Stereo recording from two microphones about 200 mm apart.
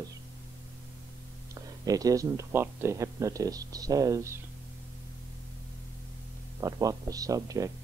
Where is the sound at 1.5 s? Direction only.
15° right (ahead or behind).